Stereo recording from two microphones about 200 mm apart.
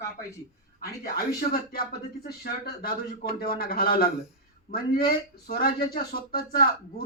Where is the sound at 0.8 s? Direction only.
45° left (ahead or behind).